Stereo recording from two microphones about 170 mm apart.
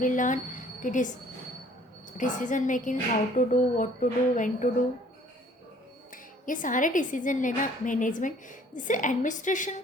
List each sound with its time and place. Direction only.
0.0 s speech: 50° left (ahead or behind)
2.1 s a woman's voice: 50° left (ahead or behind)
6.4 s a woman's voice: 50° left (ahead or behind)